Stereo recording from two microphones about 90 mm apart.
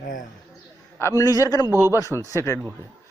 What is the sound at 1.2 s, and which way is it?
Speech, 40° left (ahead or behind).